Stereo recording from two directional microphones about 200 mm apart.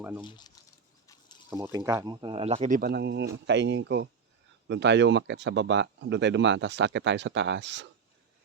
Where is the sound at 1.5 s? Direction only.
15° right (ahead or behind); by 7.8 s 60° right (ahead or behind).